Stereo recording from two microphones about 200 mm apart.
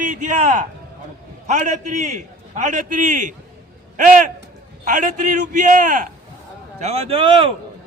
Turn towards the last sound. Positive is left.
turn(degrees=-25)  # may be behind; listen again after turning